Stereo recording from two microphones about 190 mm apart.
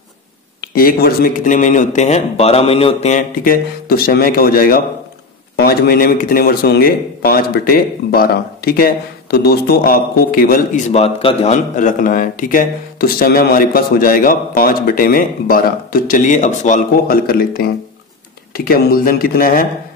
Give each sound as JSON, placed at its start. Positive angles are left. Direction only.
{"t": 0.6, "sound": "speech", "side_deg": 50}